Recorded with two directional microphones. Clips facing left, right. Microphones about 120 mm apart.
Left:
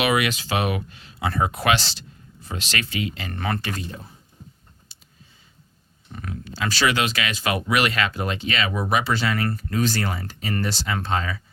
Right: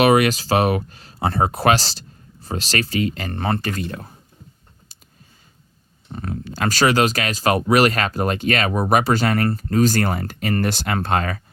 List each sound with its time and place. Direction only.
0.0 s speech: 40° right (ahead or behind)
3.8 s speech: 65° right (ahead or behind)
6.1 s speech: 35° right (ahead or behind)
6.3 s speech: 45° right (ahead or behind)